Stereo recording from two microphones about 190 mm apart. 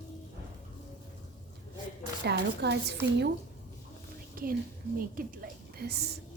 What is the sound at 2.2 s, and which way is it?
A woman's voice, 60° right (ahead or behind).